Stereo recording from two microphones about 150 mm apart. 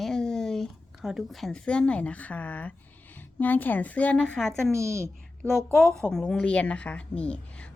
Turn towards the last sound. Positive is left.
turn(degrees=10)  # may be behind; listen again after turning